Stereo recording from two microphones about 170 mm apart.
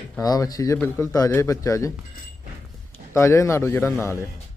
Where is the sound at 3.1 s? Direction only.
15° left (ahead or behind).